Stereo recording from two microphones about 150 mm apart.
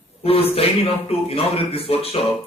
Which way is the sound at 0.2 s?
40° left (ahead or behind).